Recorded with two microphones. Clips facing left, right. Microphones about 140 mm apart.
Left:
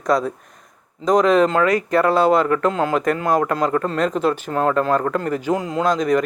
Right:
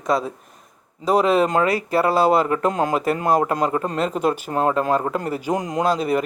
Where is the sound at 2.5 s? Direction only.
20° right (ahead or behind).